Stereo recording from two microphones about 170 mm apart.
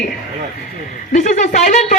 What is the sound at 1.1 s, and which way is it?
Speech, 45° left (ahead or behind).